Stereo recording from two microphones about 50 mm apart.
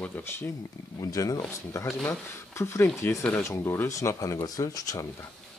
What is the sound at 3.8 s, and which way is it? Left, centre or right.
Speech, left.